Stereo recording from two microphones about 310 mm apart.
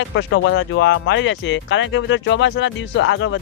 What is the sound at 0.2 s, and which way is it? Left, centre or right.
Speech, left.